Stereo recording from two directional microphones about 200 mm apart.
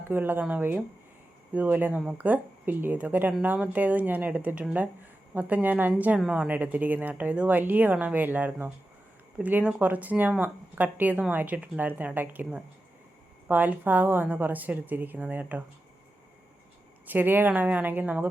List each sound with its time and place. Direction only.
0.1 s a woman's voice: 10° right (ahead or behind)
17.1 s a woman's voice: 10° right (ahead or behind)